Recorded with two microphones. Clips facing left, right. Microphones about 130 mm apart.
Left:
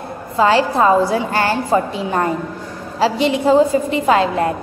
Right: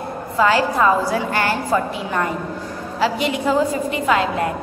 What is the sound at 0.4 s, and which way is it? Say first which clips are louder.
A woman's voice: left 3 dB; 30° left (ahead or behind).